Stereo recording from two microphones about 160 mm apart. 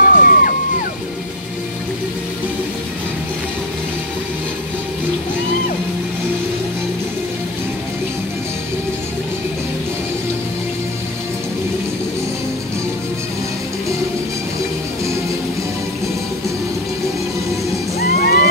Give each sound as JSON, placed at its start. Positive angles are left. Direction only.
{"t": 0.0, "sound": "music", "side_deg": 60}
{"t": 18.1, "sound": "vehicle", "side_deg": 75}